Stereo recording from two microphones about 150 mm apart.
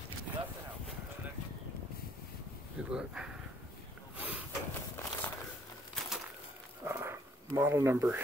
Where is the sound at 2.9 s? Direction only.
5° right (ahead or behind).